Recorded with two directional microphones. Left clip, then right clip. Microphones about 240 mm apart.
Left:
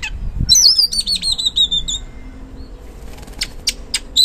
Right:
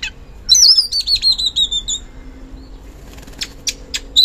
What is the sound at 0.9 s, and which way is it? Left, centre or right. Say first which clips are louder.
Chirp: right 3 dB; centre.